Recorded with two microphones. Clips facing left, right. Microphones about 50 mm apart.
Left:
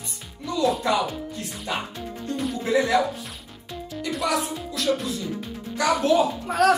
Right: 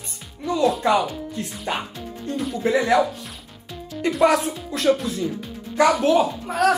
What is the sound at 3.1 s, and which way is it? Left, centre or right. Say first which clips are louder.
Music: even; centre.